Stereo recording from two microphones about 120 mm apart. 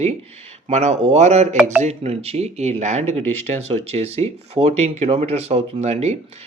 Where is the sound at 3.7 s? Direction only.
60° right (ahead or behind).